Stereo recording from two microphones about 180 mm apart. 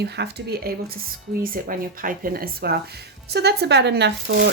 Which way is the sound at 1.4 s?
50° right (ahead or behind).